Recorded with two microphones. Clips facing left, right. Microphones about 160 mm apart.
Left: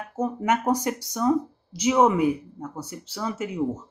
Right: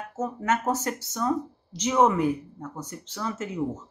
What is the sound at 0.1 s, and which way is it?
Speech, 15° left (ahead or behind).